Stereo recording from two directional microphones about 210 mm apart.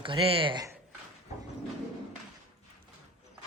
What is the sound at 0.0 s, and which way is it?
Speech, 25° right (ahead or behind).